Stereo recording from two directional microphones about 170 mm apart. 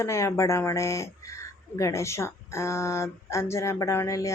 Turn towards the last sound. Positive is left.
turn(degrees=20)  # may be behind; listen again after turning